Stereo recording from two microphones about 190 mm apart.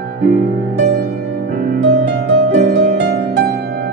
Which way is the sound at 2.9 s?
55° right (ahead or behind).